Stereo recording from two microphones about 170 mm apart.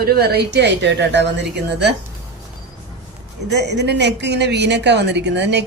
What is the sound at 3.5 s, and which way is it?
A woman's voice, 80° right.